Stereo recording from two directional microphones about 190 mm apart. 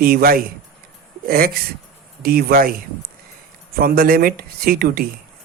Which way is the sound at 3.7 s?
50° right (ahead or behind).